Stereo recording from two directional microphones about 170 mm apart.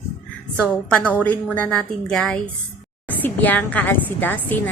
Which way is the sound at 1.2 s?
10° left (ahead or behind).